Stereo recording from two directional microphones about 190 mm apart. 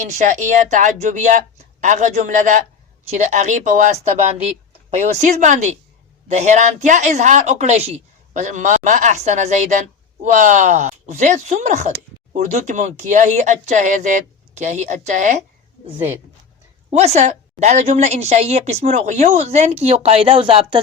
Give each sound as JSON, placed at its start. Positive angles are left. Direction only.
{"t": 0.0, "sound": "a woman's voice", "side_deg": -40}
{"t": 17.0, "sound": "a woman's voice", "side_deg": -35}